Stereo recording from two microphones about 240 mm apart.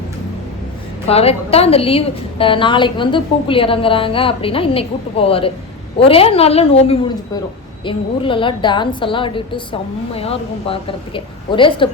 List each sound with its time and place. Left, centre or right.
1.0 s a woman's voice: left